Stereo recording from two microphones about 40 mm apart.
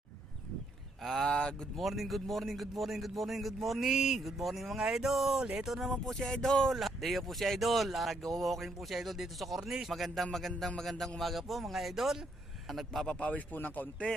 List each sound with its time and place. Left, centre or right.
1.0 s a sound: centre
1.3 s speech: centre
1.8 s speech: centre
4.8 s speech: centre
6.1 s a sound: centre
6.7 s speech: centre
9.9 s speech: centre
13.1 s speech: left
13.3 s speech: left
14.1 s speech: left